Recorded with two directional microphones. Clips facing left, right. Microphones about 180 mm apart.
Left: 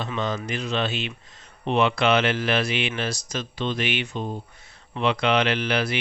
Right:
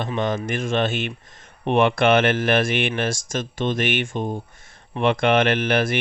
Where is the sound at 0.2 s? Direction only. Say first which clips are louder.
Right 4 dB; 50° right (ahead or behind).